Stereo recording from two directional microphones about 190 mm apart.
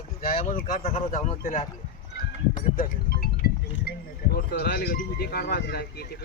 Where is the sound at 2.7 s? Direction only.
50° left (ahead or behind).